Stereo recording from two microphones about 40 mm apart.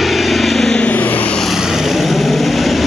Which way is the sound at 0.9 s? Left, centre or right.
Left.